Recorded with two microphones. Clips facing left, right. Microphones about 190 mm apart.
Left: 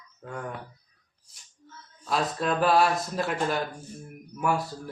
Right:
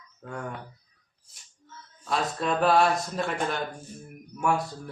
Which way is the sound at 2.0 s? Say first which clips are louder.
Left 1 dB; centre (ahead or behind).